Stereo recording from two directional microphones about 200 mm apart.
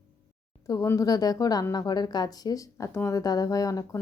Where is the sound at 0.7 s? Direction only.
15° left (ahead or behind).